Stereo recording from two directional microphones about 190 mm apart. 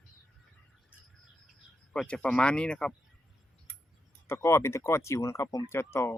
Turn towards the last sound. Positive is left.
turn(degrees=15)  # may be behind; listen again after turning